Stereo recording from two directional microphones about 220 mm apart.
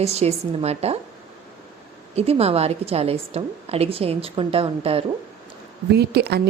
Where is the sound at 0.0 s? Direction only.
30° right (ahead or behind).